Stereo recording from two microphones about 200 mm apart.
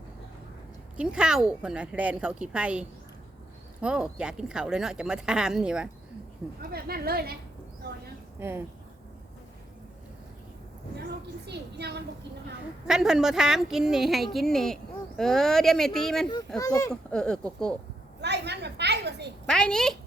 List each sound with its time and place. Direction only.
0.9 s speech: 5° right (ahead or behind)
6.6 s a woman's voice: 50° right (ahead or behind)
8.4 s speech: 10° right (ahead or behind)
11.4 s a woman's voice: 55° right (ahead or behind)
12.9 s speech: centre (ahead or behind)
16.6 s a child's voice: 15° left (ahead or behind)
16.9 s speech: 5° left (ahead or behind)
18.2 s a sound: 60° right (ahead or behind)
19.5 s speech: 5° left (ahead or behind)